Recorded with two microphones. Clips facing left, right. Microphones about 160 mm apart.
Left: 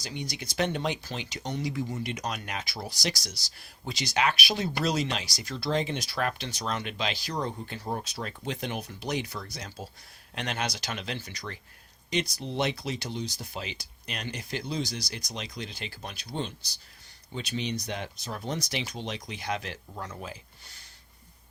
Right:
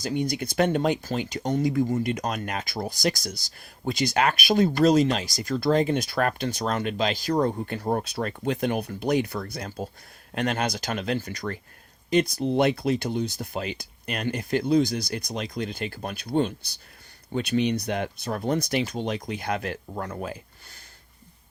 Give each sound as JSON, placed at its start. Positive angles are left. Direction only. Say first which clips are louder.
{"t": 0.0, "sound": "speech", "louder": "right 10 dB", "side_deg": -50}